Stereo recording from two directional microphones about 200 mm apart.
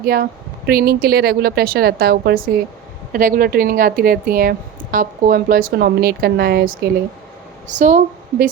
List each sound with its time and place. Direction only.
0.0 s speech: 45° right (ahead or behind)
7.8 s a woman's voice: 40° right (ahead or behind)